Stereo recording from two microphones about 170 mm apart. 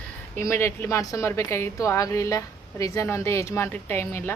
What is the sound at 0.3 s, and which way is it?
A woman's voice, 15° left (ahead or behind).